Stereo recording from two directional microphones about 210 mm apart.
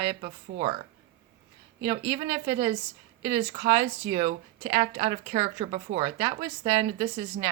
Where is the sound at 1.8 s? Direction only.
20° right (ahead or behind).